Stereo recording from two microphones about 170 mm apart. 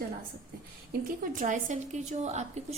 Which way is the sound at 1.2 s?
50° right (ahead or behind).